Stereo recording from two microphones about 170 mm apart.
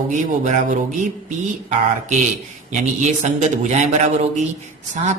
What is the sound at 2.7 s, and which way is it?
Speech, 45° right (ahead or behind).